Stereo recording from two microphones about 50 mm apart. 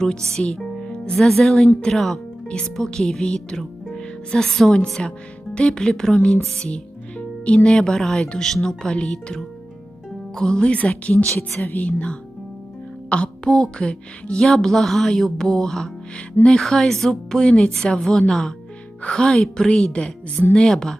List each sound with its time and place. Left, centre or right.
0.0 s a woman's voice: centre
14.4 s speech: centre
17.4 s speech: centre